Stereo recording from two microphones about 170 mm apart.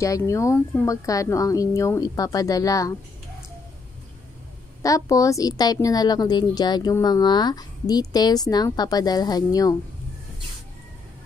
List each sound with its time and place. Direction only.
0.0 s a woman's voice: 20° left (ahead or behind)
4.8 s a woman's voice: 20° left (ahead or behind)